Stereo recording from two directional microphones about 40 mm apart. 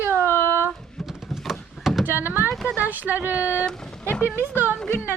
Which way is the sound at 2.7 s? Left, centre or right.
Right.